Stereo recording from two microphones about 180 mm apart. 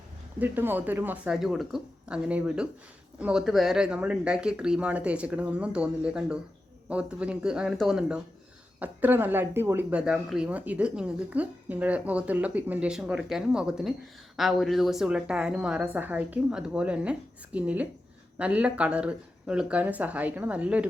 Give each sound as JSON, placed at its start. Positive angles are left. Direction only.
{"t": 0.3, "sound": "a woman's voice", "side_deg": -10}